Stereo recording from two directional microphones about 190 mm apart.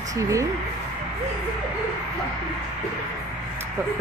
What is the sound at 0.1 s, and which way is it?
Speech, 15° right (ahead or behind).